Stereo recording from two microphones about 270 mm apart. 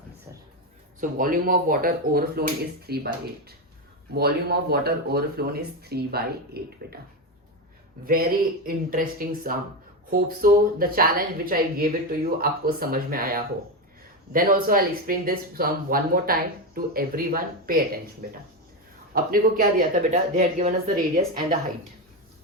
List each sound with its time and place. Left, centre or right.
1.0 s speech: right
4.1 s speech: right
8.0 s speech: right
19.1 s speech: right